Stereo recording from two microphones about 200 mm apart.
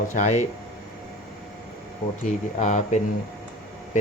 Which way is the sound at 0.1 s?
35° left (ahead or behind).